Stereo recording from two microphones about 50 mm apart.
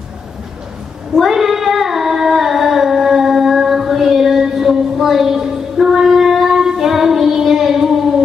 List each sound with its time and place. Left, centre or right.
1.1 s female singing: centre